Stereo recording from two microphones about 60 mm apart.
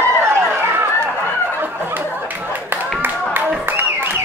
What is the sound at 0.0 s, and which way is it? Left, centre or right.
Chatter, right.